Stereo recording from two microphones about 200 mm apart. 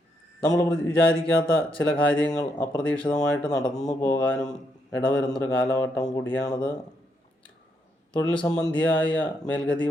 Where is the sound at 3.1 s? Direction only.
5° left (ahead or behind).